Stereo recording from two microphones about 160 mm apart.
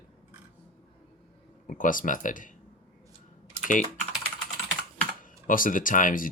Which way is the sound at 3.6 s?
55° left (ahead or behind).